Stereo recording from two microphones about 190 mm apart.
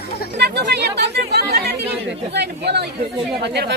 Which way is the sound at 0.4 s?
60° right (ahead or behind).